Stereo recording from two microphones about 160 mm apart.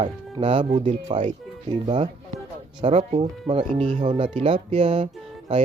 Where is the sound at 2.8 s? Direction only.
40° right (ahead or behind).